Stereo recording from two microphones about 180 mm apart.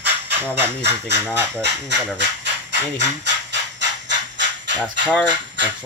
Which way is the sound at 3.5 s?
85° right.